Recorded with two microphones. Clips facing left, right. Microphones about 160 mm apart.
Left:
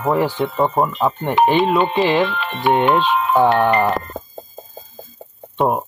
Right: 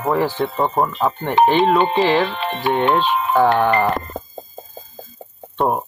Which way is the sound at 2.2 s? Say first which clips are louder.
Right 1 dB; 35° right (ahead or behind).